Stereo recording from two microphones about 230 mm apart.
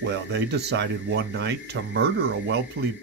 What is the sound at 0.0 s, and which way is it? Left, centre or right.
Speech, right.